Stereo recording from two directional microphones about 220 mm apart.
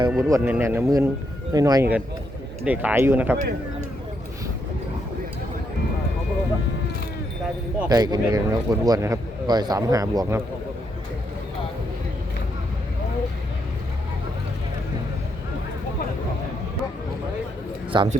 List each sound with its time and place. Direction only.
0.1 s speech: 10° right (ahead or behind)
3.3 s speech: 35° right (ahead or behind)
7.9 s speech: 20° right (ahead or behind)
17.9 s speech: 20° right (ahead or behind)